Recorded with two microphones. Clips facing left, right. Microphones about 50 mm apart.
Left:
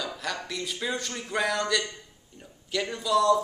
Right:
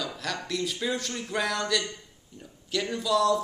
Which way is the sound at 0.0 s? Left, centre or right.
Centre.